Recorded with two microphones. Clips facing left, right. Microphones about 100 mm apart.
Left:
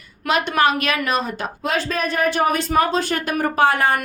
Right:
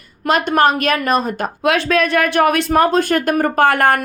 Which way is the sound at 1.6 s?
75° right (ahead or behind).